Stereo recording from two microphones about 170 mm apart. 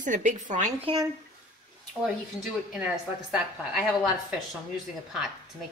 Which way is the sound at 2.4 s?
5° right (ahead or behind).